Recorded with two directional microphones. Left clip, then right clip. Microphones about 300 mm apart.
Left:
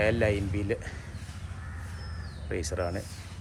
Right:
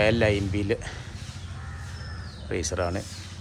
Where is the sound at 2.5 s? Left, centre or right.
Centre.